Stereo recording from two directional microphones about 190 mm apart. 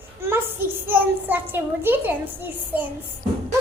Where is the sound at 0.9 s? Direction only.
10° right (ahead or behind).